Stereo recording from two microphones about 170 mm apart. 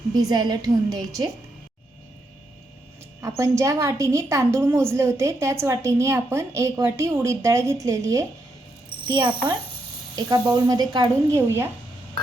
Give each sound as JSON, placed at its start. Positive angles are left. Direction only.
{"t": 0.2, "sound": "speech", "side_deg": -25}
{"t": 3.2, "sound": "a woman's voice", "side_deg": -15}
{"t": 9.0, "sound": "speech", "side_deg": -30}